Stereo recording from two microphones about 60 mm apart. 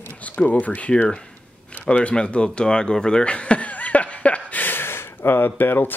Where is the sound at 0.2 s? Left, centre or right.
Left.